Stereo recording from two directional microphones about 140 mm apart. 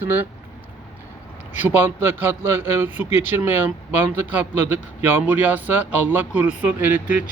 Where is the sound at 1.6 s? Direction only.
15° right (ahead or behind).